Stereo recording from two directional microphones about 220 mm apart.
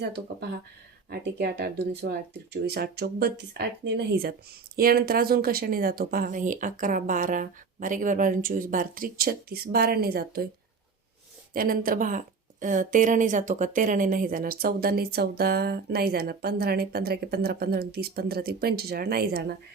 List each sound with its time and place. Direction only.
1.1 s a woman's voice: 45° right (ahead or behind)
11.5 s a woman's voice: 40° right (ahead or behind)